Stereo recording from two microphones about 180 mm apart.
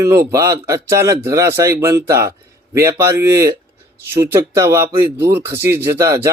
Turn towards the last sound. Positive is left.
turn(degrees=-15)  # may be behind; listen again after turning